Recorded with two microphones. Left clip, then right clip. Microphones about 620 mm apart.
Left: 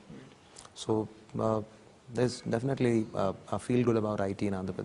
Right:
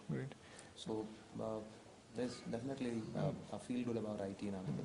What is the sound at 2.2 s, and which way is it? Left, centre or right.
Speech, left.